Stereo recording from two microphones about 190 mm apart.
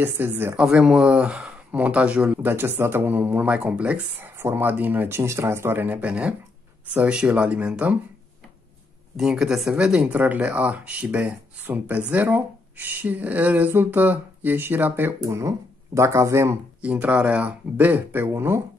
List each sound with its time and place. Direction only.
0.0 s speech: 10° right (ahead or behind)
9.1 s speech: centre (ahead or behind)